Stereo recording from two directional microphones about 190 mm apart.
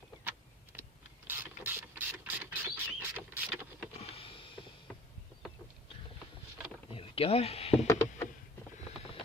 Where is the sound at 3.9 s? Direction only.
30° left (ahead or behind).